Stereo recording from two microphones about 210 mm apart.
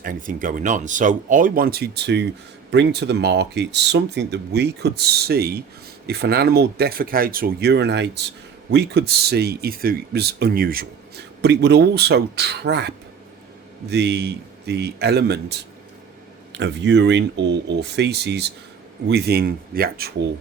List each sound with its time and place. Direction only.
0.0 s speech: 40° right (ahead or behind)
13.9 s speech: 50° right (ahead or behind)